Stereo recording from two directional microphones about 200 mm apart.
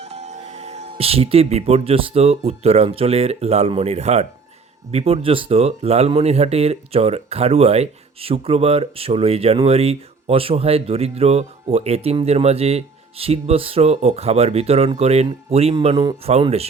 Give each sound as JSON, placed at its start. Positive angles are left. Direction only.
{"t": 0.0, "sound": "speech", "side_deg": -30}